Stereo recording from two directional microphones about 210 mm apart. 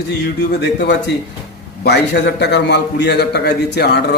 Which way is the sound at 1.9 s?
50° left (ahead or behind).